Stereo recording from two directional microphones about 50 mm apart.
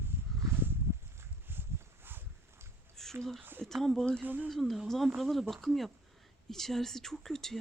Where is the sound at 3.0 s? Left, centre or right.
Centre.